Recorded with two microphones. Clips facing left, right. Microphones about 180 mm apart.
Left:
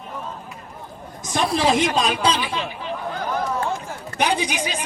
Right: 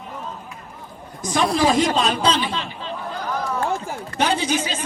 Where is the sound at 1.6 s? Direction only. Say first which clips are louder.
Right 1 dB; 20° left (ahead or behind).